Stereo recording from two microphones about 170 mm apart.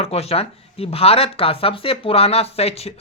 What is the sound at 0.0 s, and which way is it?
Speech, 35° left (ahead or behind).